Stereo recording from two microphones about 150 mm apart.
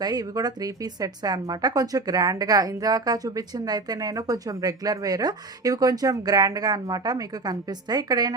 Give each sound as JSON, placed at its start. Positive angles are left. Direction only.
{"t": 0.0, "sound": "a woman's voice", "side_deg": -25}